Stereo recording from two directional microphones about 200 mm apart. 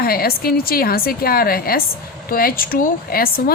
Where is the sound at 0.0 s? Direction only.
50° left (ahead or behind).